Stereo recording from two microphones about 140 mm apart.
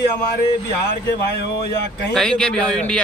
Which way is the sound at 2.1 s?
5° left (ahead or behind).